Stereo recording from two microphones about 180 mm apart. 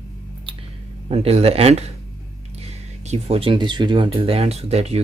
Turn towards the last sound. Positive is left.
turn(degrees=-35)  # may be behind; listen again after turning